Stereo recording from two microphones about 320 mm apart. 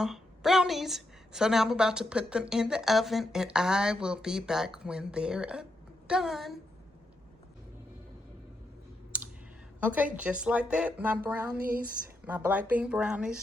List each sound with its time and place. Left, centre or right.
0.0 s a woman's voice: centre
9.8 s a woman's voice: centre
11.5 s speech: right
12.2 s a woman's voice: centre